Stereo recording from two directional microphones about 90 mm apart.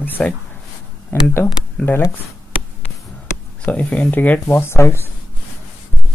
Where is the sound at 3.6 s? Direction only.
15° left (ahead or behind).